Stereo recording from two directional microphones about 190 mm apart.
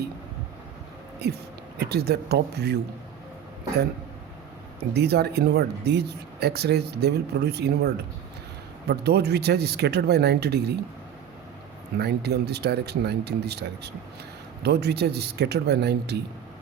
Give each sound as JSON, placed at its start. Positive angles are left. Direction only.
{"t": 1.2, "sound": "speech", "side_deg": -60}
{"t": 4.9, "sound": "speech", "side_deg": -60}
{"t": 11.9, "sound": "speech", "side_deg": -60}